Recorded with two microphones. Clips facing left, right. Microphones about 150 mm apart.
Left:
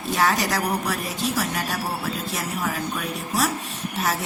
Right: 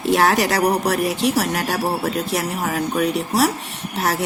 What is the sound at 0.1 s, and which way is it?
Speech, 70° right (ahead or behind).